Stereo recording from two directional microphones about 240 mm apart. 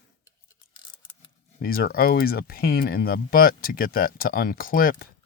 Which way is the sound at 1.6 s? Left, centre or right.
Left.